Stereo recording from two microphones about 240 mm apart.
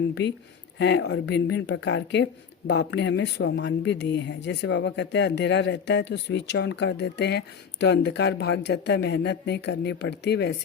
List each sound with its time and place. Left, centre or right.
0.1 s speech: left